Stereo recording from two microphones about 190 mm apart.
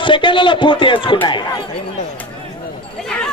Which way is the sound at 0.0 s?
25° left (ahead or behind).